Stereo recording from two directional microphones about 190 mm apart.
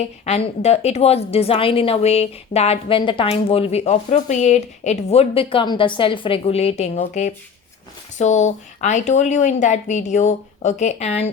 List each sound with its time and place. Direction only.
0.0 s a woman's voice: 35° left (ahead or behind)